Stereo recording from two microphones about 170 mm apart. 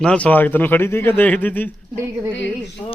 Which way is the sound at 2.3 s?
90° left.